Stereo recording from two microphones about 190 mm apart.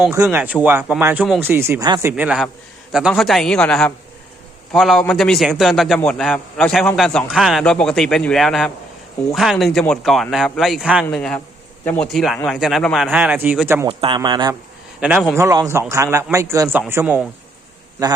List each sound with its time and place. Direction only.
0.3 s a man's voice: 10° right (ahead or behind)
13.8 s speech: 30° right (ahead or behind)
15.0 s speech: 5° right (ahead or behind)